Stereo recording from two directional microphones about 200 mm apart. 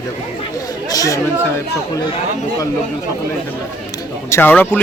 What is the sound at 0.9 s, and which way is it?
Speech, 15° left (ahead or behind).